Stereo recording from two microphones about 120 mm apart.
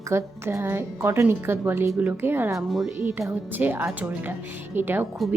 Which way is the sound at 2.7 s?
Centre (ahead or behind).